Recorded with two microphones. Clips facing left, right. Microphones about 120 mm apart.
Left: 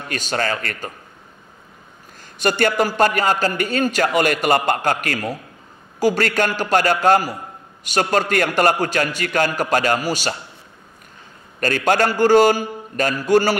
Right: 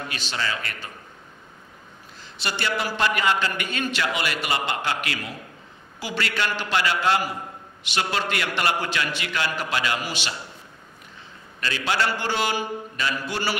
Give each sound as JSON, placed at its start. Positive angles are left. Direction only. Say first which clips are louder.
{"t": 0.1, "sound": "a man's voice", "louder": "left 10 dB", "side_deg": 45}
{"t": 2.1, "sound": "a man's voice", "louder": "left 11 dB", "side_deg": 50}
{"t": 11.6, "sound": "a man's voice", "louder": "left 8 dB", "side_deg": 50}